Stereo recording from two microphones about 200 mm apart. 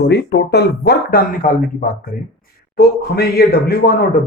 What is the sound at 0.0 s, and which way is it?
Speech, 55° left (ahead or behind).